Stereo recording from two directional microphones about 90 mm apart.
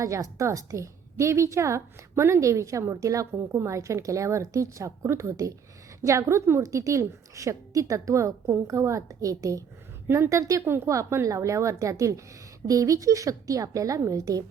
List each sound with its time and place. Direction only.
0.0 s a woman's voice: 35° right (ahead or behind)